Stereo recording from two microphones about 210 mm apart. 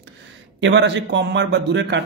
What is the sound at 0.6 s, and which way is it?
A man's voice, 60° right (ahead or behind).